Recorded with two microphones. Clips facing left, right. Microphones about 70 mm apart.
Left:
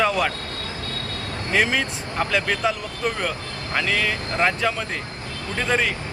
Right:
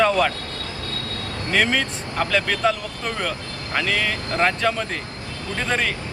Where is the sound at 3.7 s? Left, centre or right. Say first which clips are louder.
Even; centre.